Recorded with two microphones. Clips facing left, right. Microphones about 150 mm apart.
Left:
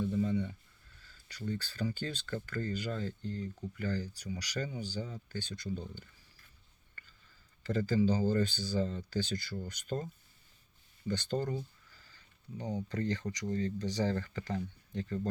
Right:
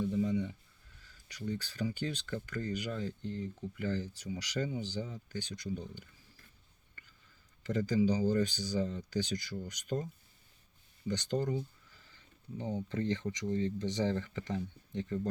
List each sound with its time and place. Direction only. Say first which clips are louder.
0.0 s a sound: even; 15° right (ahead or behind)
1.0 s speech: even; 15° right (ahead or behind)
7.6 s speech: even; 15° right (ahead or behind)
11.1 s speech: right 1 dB; 15° right (ahead or behind)
12.0 s a sound: right 2 dB; 20° right (ahead or behind)
12.9 s speech: right 2 dB; 20° right (ahead or behind)